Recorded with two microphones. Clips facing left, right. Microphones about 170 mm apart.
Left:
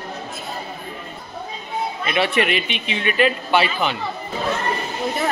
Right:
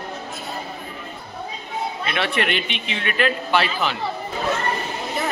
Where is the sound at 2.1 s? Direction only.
Centre (ahead or behind).